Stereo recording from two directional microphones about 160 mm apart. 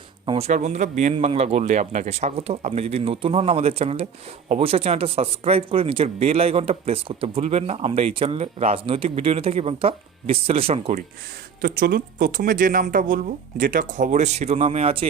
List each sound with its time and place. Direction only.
0.3 s speech: 40° right (ahead or behind)
1.1 s speech: 35° right (ahead or behind)
11.6 s speech: 65° right (ahead or behind); by 15.0 s 40° right (ahead or behind)